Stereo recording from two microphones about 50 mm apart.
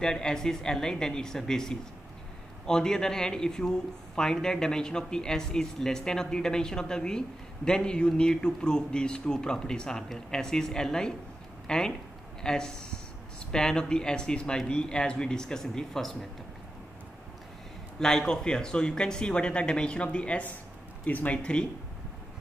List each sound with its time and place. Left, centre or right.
0.0 s speech: centre
17.9 s speech: centre; by 21.4 s left
21.4 s speech: centre